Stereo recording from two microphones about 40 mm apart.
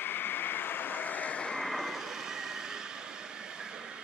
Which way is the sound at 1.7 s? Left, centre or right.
Centre.